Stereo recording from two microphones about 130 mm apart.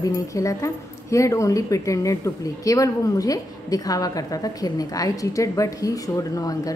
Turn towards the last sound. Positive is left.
turn(degrees=30)  # may be behind; listen again after turning